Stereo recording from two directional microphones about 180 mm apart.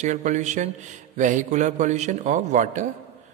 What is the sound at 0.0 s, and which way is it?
A man's voice, 40° right (ahead or behind).